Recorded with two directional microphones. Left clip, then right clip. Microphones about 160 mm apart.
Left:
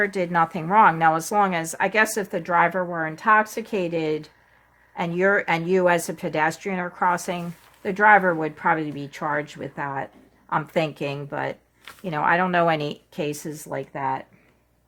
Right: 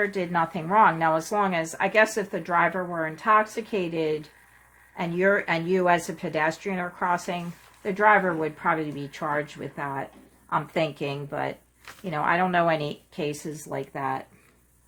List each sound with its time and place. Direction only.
0.0 s a woman's voice: 55° left (ahead or behind); by 14.2 s 40° left (ahead or behind)